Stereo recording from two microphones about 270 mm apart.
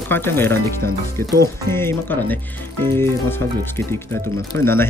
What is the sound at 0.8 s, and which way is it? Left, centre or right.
Speech, right.